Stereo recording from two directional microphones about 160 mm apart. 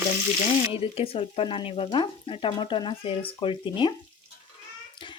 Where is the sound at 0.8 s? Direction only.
35° left (ahead or behind).